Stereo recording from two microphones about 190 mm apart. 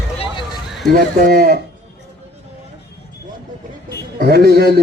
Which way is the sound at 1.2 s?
50° right (ahead or behind).